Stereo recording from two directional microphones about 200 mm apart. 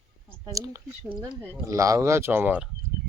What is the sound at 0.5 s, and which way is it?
Speech, 15° right (ahead or behind).